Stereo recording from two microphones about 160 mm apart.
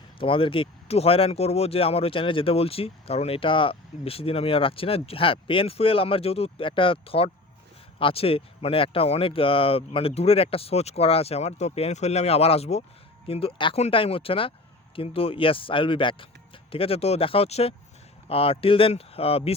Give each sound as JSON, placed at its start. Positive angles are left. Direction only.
{"t": 0.2, "sound": "speech", "side_deg": 35}